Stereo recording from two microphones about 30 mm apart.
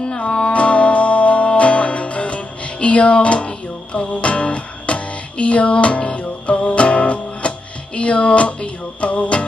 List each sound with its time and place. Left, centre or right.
0.5 s music: left